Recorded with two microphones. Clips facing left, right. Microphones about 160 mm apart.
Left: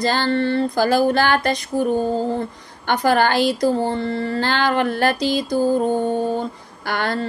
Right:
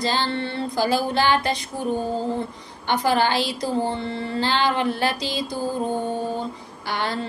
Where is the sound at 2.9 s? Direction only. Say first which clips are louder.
Left 3 dB; 55° left (ahead or behind).